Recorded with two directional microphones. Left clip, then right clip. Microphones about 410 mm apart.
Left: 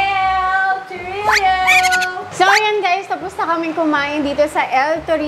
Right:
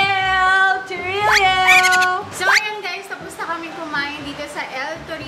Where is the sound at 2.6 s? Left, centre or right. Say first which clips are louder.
Left 9 dB; left.